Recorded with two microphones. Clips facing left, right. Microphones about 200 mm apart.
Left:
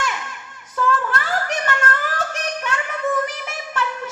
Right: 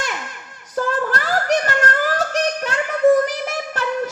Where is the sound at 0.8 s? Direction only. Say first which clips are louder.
Right 1 dB; 35° right (ahead or behind).